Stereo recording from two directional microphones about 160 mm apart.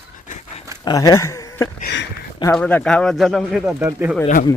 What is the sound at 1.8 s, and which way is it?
Speech, 90° left.